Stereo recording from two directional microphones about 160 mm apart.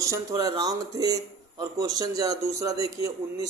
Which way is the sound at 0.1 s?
25° right (ahead or behind).